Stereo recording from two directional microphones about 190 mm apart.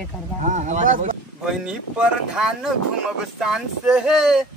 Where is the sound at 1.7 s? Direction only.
5° right (ahead or behind).